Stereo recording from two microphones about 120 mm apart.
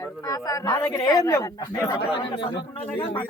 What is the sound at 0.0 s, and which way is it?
A man's voice, 30° left (ahead or behind).